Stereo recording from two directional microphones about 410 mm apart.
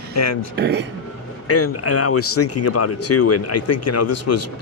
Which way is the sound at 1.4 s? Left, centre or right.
Left.